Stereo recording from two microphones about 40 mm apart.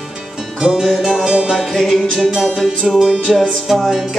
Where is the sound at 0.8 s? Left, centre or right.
Centre.